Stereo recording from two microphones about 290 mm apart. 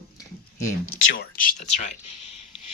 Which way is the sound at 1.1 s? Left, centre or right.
Left.